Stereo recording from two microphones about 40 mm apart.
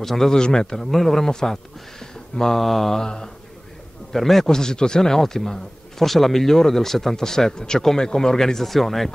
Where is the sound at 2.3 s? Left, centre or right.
Centre.